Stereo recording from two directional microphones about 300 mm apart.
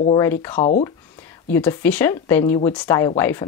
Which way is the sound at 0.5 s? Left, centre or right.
Left.